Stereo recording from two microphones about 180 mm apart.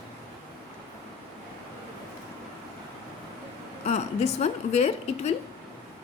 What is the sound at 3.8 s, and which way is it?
A woman's voice, 35° left (ahead or behind).